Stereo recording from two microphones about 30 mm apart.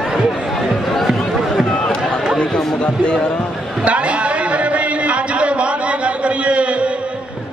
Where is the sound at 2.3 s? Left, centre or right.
Left.